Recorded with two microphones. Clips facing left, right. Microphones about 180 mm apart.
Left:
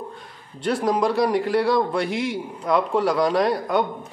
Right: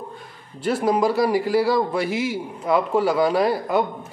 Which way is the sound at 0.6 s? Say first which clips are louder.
Right 1 dB; 5° right (ahead or behind).